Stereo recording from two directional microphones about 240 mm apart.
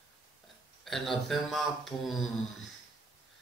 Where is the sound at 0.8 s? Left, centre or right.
Centre.